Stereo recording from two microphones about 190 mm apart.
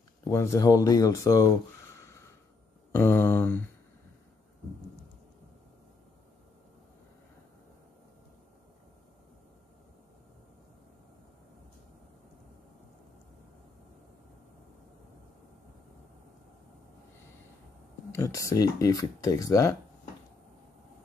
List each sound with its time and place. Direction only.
0.3 s speech: 15° left (ahead or behind)
2.9 s speech: 10° left (ahead or behind)
18.1 s speech: 15° left (ahead or behind)